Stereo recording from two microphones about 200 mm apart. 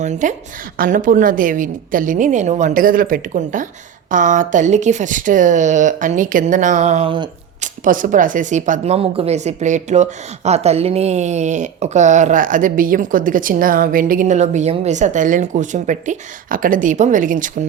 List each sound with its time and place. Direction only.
0.0 s speech: 35° right (ahead or behind)
7.6 s speech: 40° right (ahead or behind)